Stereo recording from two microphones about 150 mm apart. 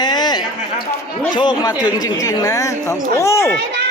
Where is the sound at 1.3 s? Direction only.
30° left (ahead or behind).